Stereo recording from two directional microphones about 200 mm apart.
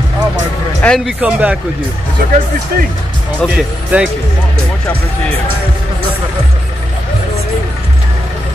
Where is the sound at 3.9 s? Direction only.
10° right (ahead or behind).